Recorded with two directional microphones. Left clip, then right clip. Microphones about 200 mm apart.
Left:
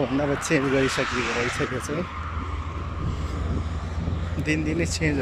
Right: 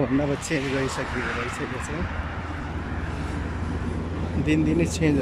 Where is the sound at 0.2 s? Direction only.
5° right (ahead or behind).